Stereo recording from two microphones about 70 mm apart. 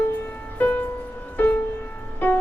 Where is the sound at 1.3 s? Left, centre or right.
Left.